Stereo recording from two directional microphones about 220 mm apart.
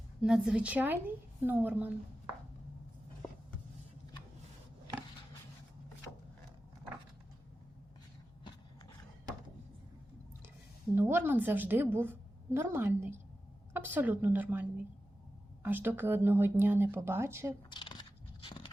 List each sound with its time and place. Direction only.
0.2 s a woman's voice: 5° right (ahead or behind)
10.9 s a woman's voice: 10° right (ahead or behind)
17.7 s a sound: 20° left (ahead or behind)